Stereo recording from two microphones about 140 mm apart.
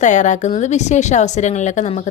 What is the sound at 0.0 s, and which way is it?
A woman's voice, 60° left (ahead or behind).